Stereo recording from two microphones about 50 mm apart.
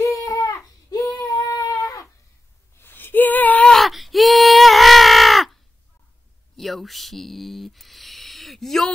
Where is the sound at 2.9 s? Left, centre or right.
Left.